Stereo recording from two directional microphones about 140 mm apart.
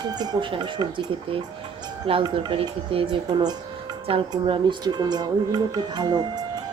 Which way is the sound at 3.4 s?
30° right (ahead or behind).